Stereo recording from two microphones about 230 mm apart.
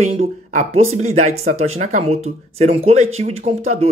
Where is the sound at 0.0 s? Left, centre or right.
Right.